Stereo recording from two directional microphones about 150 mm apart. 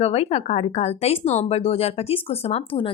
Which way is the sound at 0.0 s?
45° left (ahead or behind).